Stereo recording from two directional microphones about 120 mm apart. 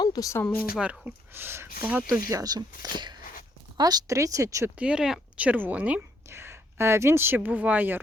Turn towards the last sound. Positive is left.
turn(degrees=-15)  # may be behind; listen again after turning